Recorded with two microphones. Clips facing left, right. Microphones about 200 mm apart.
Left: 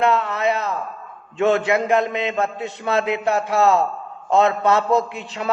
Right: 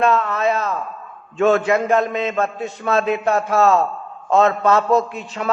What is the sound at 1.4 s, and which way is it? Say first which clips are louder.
A man's voice: right 2 dB; 20° left (ahead or behind).